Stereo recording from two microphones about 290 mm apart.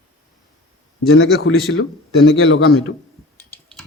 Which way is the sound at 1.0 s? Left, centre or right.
Left.